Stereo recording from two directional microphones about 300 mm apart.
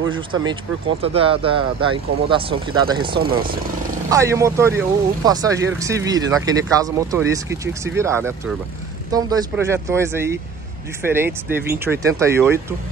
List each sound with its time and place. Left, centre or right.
1.0 s speech: centre
3.2 s speech: right
4.1 s speech: centre